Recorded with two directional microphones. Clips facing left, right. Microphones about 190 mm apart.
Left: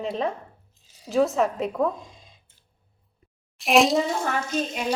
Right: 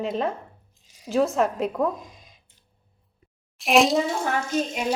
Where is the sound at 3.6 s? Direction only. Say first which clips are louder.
Even; centre (ahead or behind).